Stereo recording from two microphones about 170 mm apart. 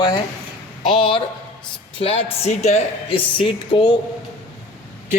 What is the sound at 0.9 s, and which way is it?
Speech, 30° left (ahead or behind).